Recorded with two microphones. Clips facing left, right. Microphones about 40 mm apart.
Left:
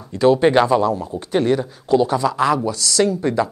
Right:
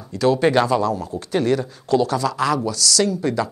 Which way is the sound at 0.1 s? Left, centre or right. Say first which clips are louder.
Left 3 dB; left.